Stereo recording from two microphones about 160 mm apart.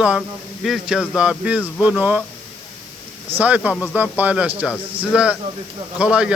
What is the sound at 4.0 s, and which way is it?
A man's voice, 10° right (ahead or behind).